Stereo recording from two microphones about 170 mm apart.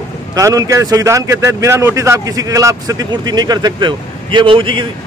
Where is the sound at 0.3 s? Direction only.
20° right (ahead or behind).